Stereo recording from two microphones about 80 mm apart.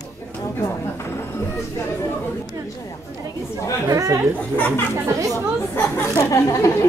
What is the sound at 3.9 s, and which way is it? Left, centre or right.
Chatter, right.